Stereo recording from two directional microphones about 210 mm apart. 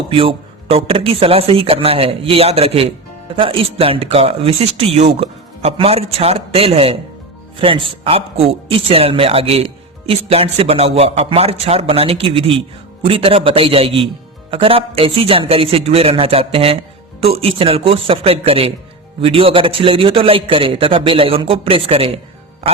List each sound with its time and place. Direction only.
0.1 s speech: 25° right (ahead or behind)
22.6 s music: 30° right (ahead or behind)